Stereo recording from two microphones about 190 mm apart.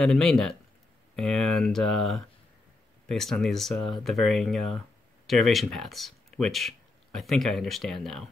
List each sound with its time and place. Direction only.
0.0 s speech: centre (ahead or behind)